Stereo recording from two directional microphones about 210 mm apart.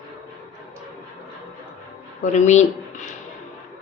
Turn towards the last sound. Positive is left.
turn(degrees=35)  # may be behind; listen again after turning